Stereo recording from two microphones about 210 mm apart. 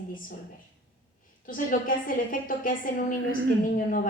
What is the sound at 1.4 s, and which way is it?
A woman's voice, 40° left (ahead or behind).